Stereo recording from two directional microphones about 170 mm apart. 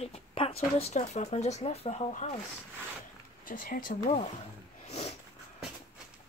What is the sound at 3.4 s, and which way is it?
Speech, 55° left (ahead or behind).